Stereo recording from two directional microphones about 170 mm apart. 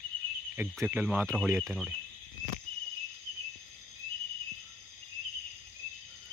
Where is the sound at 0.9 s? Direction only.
10° right (ahead or behind).